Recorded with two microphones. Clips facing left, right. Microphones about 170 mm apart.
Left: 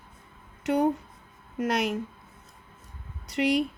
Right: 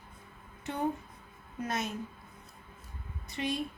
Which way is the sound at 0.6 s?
85° left.